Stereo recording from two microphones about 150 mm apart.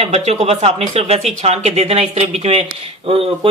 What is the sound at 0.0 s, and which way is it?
A man's voice, 45° right (ahead or behind).